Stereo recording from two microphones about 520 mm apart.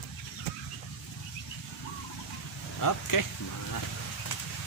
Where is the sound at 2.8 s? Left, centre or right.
Left.